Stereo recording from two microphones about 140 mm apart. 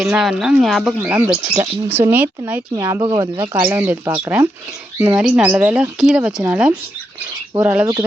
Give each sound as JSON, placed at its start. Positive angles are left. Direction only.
{"t": 0.0, "sound": "speech", "side_deg": -5}
{"t": 0.9, "sound": "speech", "side_deg": -10}
{"t": 3.5, "sound": "speech", "side_deg": -15}